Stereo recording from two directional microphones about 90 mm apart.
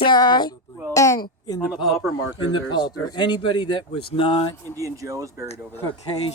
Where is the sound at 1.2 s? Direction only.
50° left (ahead or behind).